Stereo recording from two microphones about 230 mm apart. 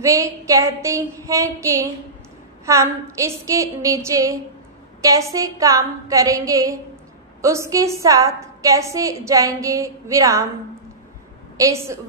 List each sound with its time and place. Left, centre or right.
0.0 s a woman's voice: centre
11.5 s a woman's voice: centre